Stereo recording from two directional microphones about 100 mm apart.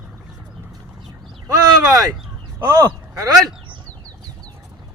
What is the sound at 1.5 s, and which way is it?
Speech, 35° right (ahead or behind).